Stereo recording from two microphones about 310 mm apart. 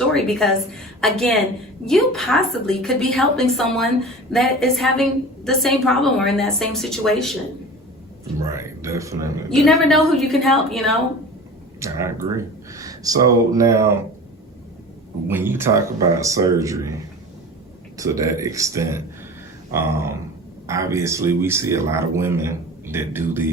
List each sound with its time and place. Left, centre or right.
0.1 s a woman's voice: centre
8.4 s a woman's voice: centre
15.3 s speech: centre
17.9 s speech: centre